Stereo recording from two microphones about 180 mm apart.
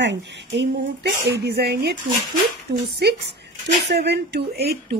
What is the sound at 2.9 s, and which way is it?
Speech, 65° right (ahead or behind).